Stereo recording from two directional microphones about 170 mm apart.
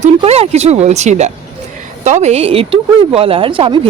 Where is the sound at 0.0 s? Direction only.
35° right (ahead or behind).